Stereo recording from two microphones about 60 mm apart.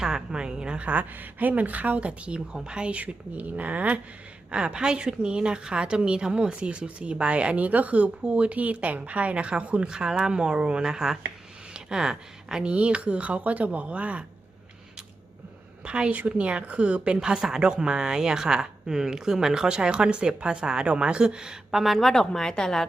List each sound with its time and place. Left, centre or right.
0.0 s a woman's voice: centre
15.8 s speech: centre
21.9 s a woman's voice: centre